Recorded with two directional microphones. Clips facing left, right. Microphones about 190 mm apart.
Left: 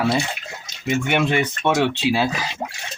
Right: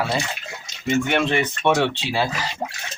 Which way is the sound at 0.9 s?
10° left (ahead or behind).